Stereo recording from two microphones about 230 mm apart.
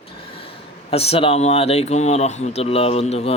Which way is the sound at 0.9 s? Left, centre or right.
Left.